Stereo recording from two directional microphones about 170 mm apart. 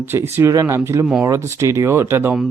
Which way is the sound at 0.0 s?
10° right (ahead or behind).